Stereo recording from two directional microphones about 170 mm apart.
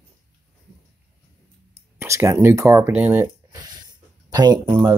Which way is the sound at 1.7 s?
15° right (ahead or behind).